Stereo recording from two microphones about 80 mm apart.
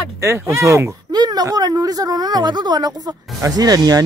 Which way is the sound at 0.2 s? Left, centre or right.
Right.